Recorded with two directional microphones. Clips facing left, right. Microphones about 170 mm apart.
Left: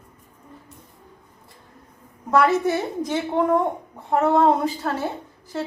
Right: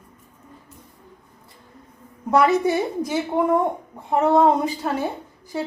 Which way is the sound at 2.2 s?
15° right (ahead or behind).